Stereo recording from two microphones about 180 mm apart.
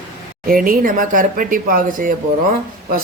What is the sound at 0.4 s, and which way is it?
Speech, 50° right (ahead or behind).